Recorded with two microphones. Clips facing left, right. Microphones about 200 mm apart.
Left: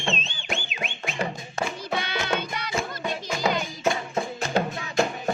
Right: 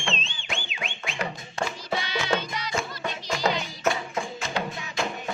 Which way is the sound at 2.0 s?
55° left (ahead or behind).